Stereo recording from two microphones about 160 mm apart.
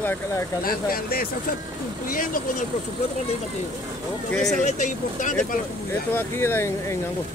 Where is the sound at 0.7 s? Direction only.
65° left (ahead or behind).